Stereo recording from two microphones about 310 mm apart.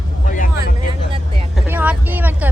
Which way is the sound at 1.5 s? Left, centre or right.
Centre.